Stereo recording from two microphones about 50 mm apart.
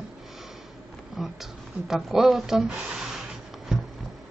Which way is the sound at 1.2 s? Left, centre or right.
Centre.